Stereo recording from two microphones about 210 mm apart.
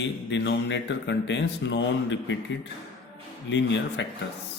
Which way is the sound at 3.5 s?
60° left (ahead or behind).